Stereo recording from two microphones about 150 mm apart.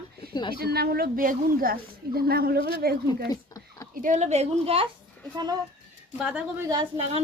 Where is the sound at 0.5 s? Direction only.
90° right.